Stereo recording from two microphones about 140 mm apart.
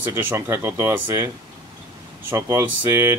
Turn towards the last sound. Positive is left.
turn(degrees=-20)  # may be behind; listen again after turning